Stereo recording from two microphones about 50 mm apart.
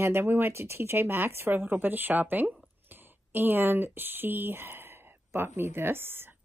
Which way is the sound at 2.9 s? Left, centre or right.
Right.